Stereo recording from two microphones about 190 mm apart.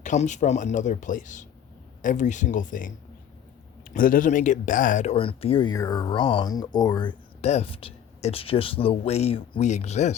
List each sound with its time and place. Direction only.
0.0 s speech: 40° left (ahead or behind)
5.1 s speech: 30° left (ahead or behind)
7.4 s speech: 35° left (ahead or behind)